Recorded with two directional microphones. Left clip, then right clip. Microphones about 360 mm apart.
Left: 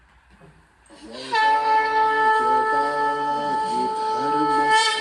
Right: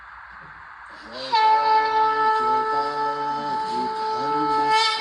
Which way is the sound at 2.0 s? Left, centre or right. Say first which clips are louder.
Left 1 dB; centre.